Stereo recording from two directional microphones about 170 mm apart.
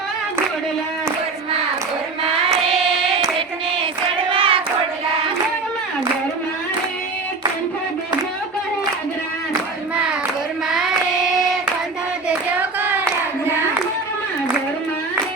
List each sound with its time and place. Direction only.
4.3 s child singing: 30° right (ahead or behind)
12.3 s hands: 10° right (ahead or behind)